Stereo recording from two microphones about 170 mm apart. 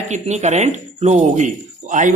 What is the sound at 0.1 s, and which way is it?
Speech, 40° right (ahead or behind).